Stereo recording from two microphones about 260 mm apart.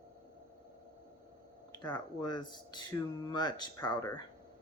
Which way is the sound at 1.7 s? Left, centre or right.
Centre.